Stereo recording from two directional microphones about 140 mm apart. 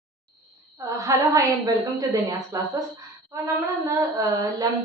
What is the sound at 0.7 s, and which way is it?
A woman's voice, 20° right (ahead or behind).